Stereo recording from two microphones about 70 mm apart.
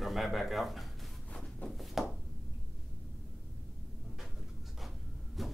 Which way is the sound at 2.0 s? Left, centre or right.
Centre.